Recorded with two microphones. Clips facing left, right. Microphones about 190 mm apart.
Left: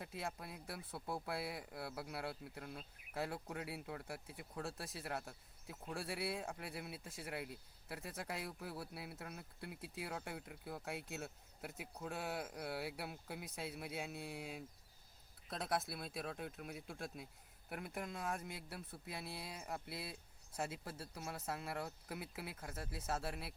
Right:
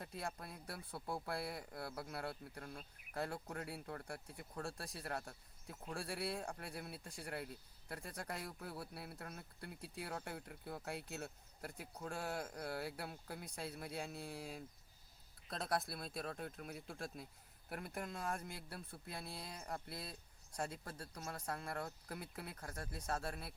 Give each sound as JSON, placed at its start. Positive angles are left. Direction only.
{"t": 0.0, "sound": "speech", "side_deg": 5}